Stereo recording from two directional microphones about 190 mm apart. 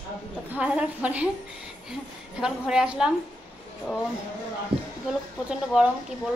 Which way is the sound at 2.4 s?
5° right (ahead or behind).